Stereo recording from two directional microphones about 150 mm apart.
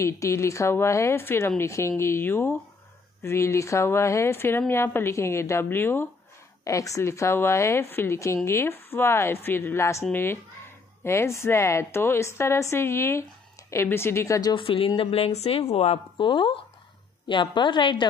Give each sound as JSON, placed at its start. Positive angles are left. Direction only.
{"t": 0.0, "sound": "a woman's voice", "side_deg": 20}
{"t": 14.5, "sound": "speech", "side_deg": 35}